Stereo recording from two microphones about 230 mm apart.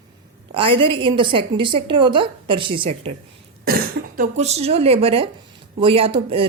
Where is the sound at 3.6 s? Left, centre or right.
Right.